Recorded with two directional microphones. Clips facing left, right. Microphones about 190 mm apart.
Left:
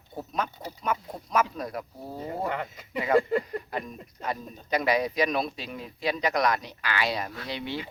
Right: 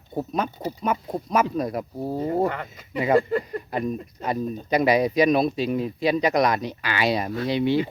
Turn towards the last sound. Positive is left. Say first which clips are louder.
# right 12 dB
turn(degrees=-15)  # may be behind; listen again after turning